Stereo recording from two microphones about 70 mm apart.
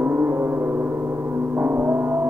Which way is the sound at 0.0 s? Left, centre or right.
Right.